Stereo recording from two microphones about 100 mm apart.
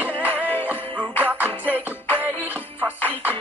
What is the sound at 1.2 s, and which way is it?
Music, 20° right (ahead or behind).